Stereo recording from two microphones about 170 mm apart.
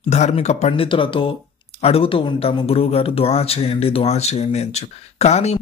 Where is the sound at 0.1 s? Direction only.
40° left (ahead or behind).